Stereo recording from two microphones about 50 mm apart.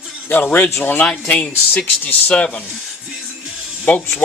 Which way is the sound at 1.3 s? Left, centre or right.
Left.